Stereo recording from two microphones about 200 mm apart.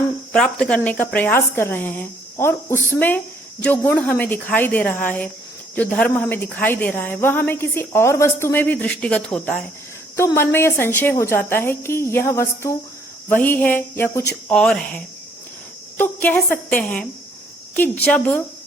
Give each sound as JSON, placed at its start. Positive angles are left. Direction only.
{"t": 0.3, "sound": "a woman's voice", "side_deg": 5}